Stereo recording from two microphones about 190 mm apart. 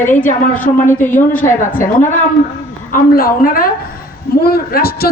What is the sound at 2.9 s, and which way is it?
A man's voice, 50° left (ahead or behind).